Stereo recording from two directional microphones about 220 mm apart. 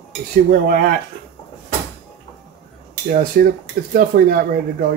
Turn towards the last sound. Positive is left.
turn(degrees=-40)  # may be behind; listen again after turning